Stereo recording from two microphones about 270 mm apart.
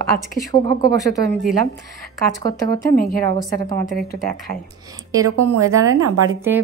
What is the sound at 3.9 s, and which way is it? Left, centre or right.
Speech, left.